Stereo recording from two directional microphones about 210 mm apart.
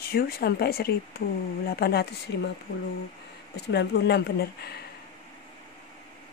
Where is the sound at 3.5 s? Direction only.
50° left (ahead or behind).